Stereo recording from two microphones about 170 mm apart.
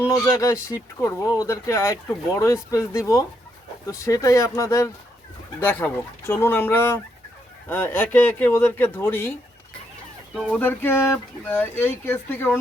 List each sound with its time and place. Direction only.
0.1 s speech: 20° left (ahead or behind)
10.5 s speech: 10° left (ahead or behind)